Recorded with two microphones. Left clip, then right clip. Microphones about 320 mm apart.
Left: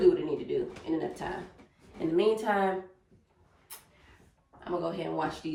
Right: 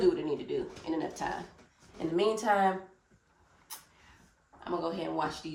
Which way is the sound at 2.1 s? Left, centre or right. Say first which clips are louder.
Left 3 dB; right.